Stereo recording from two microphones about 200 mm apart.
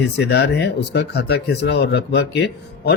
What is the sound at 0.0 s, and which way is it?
Speech, 55° left (ahead or behind).